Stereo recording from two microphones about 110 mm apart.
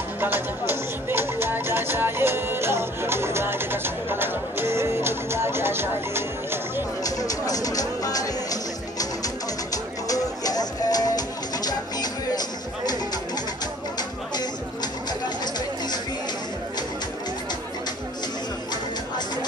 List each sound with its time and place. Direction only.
0.2 s music: 20° right (ahead or behind)
7.0 s music: 35° left (ahead or behind)
10.0 s music: 35° left (ahead or behind)